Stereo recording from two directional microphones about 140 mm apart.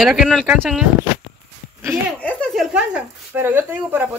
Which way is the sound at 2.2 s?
10° left (ahead or behind).